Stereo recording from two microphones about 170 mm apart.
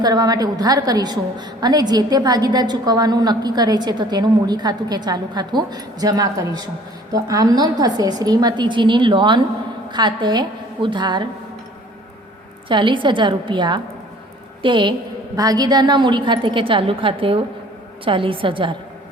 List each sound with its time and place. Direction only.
0.0 s a woman's voice: 20° right (ahead or behind)
12.6 s a woman's voice: 30° right (ahead or behind)